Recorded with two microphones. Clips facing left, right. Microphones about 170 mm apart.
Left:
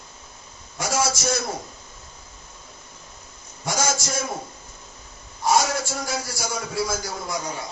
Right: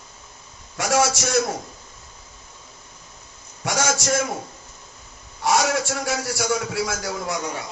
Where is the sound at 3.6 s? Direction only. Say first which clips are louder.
Right 2 dB; 70° right (ahead or behind).